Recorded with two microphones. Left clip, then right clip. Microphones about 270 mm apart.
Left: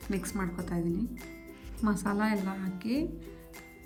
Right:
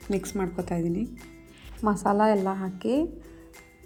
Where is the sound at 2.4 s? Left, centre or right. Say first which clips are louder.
Right 8 dB; right.